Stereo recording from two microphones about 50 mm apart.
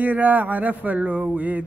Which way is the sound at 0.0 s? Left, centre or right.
Right.